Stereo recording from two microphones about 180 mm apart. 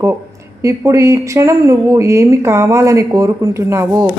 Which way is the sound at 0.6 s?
15° right (ahead or behind).